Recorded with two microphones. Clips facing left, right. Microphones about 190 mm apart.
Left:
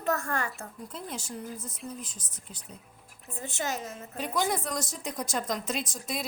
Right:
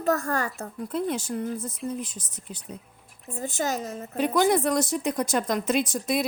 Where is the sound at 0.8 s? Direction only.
65° right (ahead or behind).